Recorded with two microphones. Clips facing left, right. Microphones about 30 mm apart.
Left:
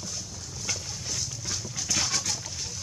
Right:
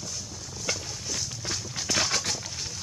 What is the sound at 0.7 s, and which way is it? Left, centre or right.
Wild animals, centre.